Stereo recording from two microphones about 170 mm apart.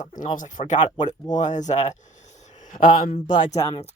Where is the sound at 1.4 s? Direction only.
45° left (ahead or behind).